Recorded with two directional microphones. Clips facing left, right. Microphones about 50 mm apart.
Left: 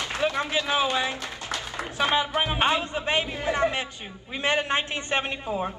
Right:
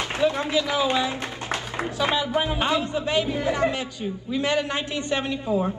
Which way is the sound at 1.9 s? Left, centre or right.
Left.